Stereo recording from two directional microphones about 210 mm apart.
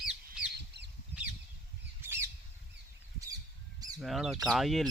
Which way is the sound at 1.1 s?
55° left (ahead or behind).